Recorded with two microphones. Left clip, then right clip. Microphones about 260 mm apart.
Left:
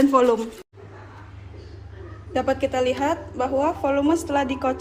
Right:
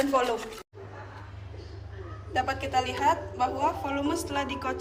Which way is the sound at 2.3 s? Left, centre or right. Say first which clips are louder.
Left 5 dB; left.